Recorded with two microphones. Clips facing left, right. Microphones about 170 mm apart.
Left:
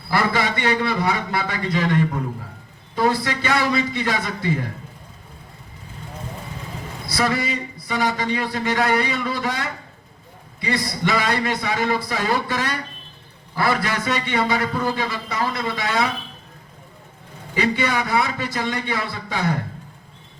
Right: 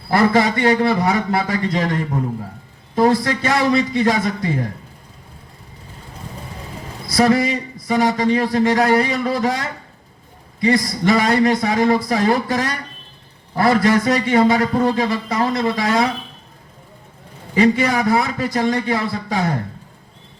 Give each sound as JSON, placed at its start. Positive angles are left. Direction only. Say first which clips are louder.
{"t": 0.1, "sound": "speech", "louder": "right 6 dB", "side_deg": -40}
{"t": 7.2, "sound": "speech", "louder": "right 7 dB", "side_deg": -40}
{"t": 17.5, "sound": "speech", "louder": "right 6 dB", "side_deg": -40}